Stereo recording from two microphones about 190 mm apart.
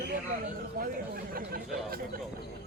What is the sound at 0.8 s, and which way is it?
Speech, 50° right (ahead or behind).